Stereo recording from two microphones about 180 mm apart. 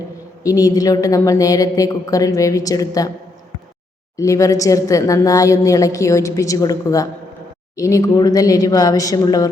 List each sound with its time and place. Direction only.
0.4 s a woman's voice: 20° left (ahead or behind)
4.2 s a woman's voice: 15° left (ahead or behind)